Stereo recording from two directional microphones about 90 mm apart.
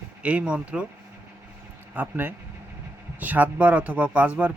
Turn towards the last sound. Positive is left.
turn(degrees=-15)  # may be behind; listen again after turning